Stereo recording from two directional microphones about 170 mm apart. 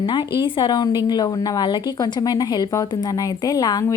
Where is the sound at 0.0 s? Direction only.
25° left (ahead or behind).